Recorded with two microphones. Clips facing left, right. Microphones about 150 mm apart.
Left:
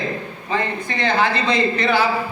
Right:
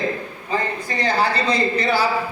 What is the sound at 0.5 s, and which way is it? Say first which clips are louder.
Speech: left 1 dB; 40° right (ahead or behind).